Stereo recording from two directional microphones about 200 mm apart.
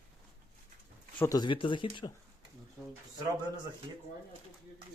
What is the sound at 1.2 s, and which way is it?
Speech, 15° left (ahead or behind).